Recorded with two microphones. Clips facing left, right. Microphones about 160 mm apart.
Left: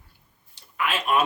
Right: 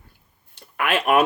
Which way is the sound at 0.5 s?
60° right (ahead or behind).